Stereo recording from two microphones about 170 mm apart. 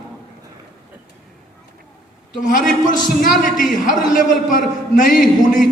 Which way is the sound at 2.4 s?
50° left (ahead or behind).